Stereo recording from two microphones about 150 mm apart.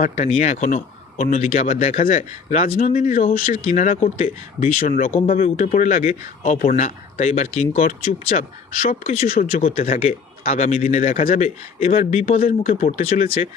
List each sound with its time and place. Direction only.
0.0 s a man's voice: 45° left (ahead or behind); by 3.6 s 60° left (ahead or behind)
3.6 s a man's voice: 50° left (ahead or behind); by 5.1 s 65° left (ahead or behind)
5.1 s a man's voice: 40° left (ahead or behind)
5.6 s a man's voice: 55° left (ahead or behind)
8.4 s speech: 65° left (ahead or behind)
9.9 s a man's voice: 45° left (ahead or behind)
12.6 s a man's voice: 40° left (ahead or behind)